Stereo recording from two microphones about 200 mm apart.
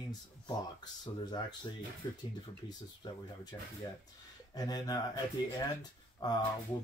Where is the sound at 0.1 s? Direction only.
20° left (ahead or behind).